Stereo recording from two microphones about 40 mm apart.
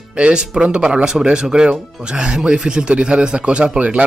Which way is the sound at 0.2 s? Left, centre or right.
Right.